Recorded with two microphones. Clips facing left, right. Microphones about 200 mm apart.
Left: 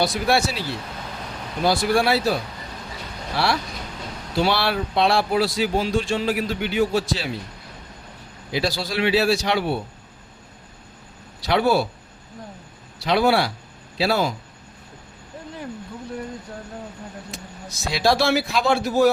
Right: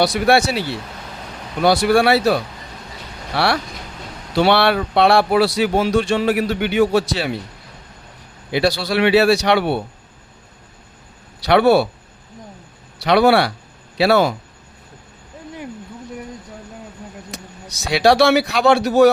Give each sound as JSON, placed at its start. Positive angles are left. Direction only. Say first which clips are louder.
{"t": 0.0, "sound": "speech", "louder": "right 5 dB", "side_deg": -70}
{"t": 8.5, "sound": "speech", "louder": "right 6 dB", "side_deg": -65}
{"t": 11.4, "sound": "speech", "louder": "right 6 dB", "side_deg": -70}
{"t": 13.1, "sound": "speech", "louder": "right 5 dB", "side_deg": -70}
{"t": 17.8, "sound": "speech", "louder": "right 6 dB", "side_deg": -70}